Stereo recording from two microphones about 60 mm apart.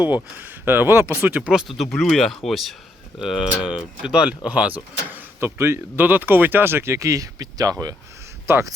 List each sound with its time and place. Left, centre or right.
0.0 s speech: right
1.6 s speech: centre
3.6 s speech: centre
4.4 s speech: right
5.5 s speech: right
6.1 s speech: right
8.5 s speech: right